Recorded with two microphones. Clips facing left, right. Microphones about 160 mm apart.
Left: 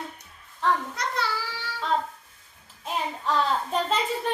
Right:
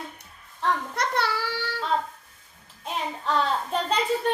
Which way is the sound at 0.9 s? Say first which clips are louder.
Right 3 dB; 65° right (ahead or behind).